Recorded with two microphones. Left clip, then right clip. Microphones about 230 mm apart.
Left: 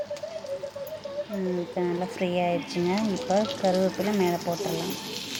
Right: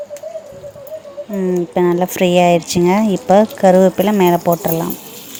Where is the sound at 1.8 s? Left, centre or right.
Right.